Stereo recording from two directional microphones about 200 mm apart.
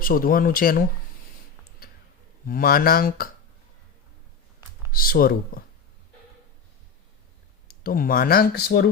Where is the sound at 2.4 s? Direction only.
45° left (ahead or behind).